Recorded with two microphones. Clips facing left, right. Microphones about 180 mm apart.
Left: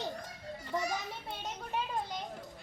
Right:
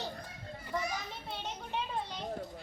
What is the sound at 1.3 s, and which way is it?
Children playing, 5° left (ahead or behind).